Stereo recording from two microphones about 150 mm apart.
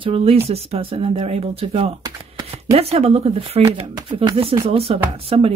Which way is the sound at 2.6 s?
45° right (ahead or behind).